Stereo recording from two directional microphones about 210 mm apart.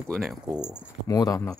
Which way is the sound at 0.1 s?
Centre (ahead or behind).